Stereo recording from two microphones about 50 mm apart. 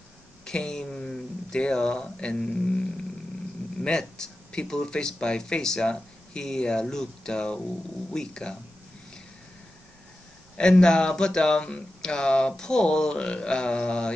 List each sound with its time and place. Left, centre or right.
0.5 s speech: centre
10.6 s speech: centre